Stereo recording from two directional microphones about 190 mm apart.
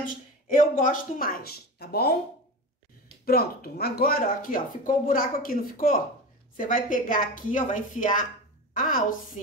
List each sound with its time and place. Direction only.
0.0 s speech: 45° left (ahead or behind)
3.3 s speech: 55° left (ahead or behind)